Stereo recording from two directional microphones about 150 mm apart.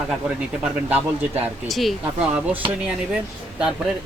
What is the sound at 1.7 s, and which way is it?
Speech, centre (ahead or behind).